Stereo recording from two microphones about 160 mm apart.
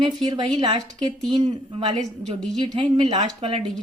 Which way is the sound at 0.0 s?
25° right (ahead or behind).